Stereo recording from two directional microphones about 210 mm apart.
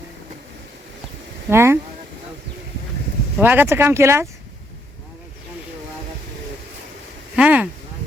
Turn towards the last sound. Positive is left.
turn(degrees=-5)  # may be behind; listen again after turning